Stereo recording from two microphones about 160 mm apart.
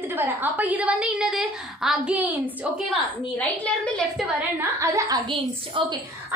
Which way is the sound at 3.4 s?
10° left (ahead or behind).